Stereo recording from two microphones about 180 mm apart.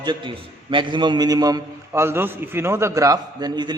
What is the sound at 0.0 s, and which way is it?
A man's voice, 25° right (ahead or behind).